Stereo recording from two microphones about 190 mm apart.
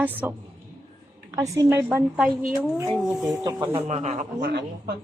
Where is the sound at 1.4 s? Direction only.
15° right (ahead or behind).